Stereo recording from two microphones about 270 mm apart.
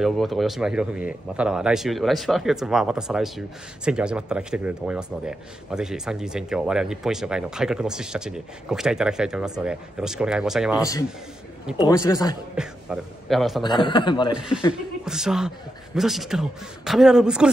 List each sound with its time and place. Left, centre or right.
0.0 s speech: centre
11.9 s speech: centre
12.5 s speech: centre
13.6 s speech: centre
14.3 s speech: centre